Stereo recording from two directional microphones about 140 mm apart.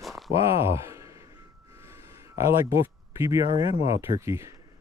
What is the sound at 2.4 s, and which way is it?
Speech, 20° right (ahead or behind).